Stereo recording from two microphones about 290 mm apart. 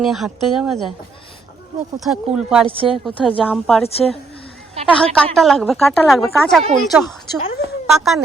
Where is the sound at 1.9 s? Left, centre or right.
Centre.